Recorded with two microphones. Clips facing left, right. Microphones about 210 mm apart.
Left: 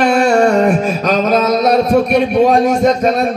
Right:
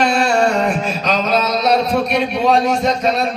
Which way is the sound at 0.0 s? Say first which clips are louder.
Left 5 dB; 50° left (ahead or behind).